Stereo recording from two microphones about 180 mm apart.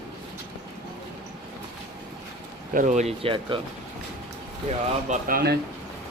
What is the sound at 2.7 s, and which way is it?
Speech, 45° right (ahead or behind).